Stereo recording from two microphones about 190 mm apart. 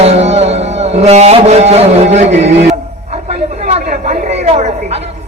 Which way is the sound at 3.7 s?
40° right (ahead or behind).